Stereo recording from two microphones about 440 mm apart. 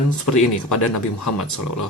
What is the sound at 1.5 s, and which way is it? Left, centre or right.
Speech, left.